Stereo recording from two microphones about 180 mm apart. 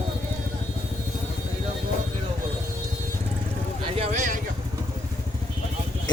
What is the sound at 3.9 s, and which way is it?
Vehicle, 40° right (ahead or behind).